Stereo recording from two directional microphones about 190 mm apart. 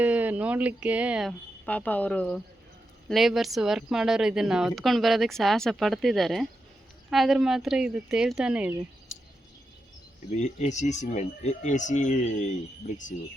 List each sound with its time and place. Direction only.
0.0 s speech: 10° right (ahead or behind)
1.6 s speech: 10° left (ahead or behind)
10.3 s speech: 35° left (ahead or behind)